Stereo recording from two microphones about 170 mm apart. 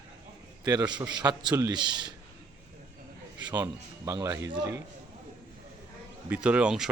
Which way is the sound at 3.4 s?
25° right (ahead or behind).